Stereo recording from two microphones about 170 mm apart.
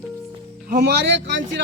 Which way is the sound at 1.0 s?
90° right.